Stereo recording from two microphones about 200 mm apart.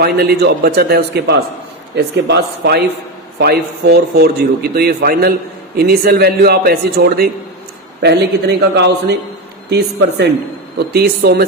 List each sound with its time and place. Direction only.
0.0 s a man's voice: 55° right (ahead or behind)